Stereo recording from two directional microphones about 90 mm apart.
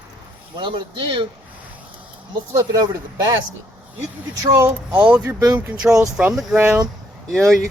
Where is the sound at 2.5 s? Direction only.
35° right (ahead or behind).